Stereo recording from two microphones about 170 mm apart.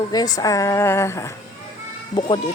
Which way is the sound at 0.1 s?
20° left (ahead or behind).